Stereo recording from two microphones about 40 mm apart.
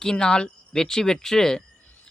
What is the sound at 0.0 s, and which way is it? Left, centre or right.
Speech, centre.